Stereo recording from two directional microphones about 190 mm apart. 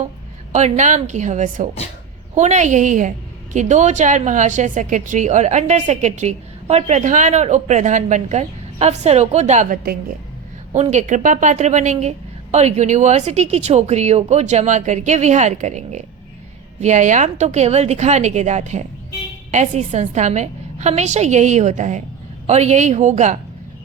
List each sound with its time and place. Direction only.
0.5 s a woman's voice: 40° right (ahead or behind)